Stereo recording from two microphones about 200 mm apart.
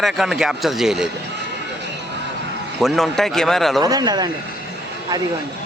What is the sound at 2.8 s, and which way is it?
Speech, centre (ahead or behind).